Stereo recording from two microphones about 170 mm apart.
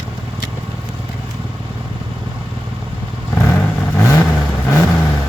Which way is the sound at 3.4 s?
15° left (ahead or behind).